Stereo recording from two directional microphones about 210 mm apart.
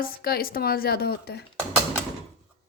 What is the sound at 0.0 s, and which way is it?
A woman's voice, 45° left (ahead or behind).